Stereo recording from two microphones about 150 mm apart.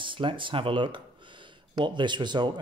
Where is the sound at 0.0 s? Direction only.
35° right (ahead or behind).